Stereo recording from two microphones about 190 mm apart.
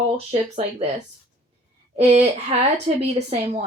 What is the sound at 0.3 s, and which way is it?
Speech, 35° right (ahead or behind).